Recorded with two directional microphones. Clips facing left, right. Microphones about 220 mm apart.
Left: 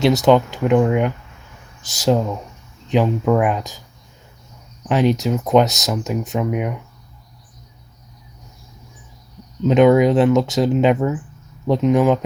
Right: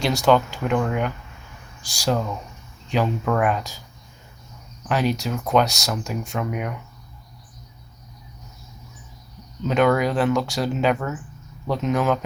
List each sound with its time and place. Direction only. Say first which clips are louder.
0.0 s speech: left 5 dB; 20° left (ahead or behind)
4.9 s speech: left 6 dB; 20° left (ahead or behind)
9.6 s speech: left 7 dB; 20° left (ahead or behind)